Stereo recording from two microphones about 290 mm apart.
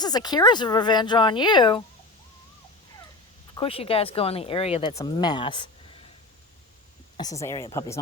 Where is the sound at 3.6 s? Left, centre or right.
Centre.